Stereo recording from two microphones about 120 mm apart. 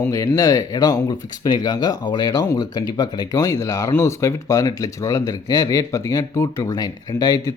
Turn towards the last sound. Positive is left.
turn(degrees=30)  # may be behind; listen again after turning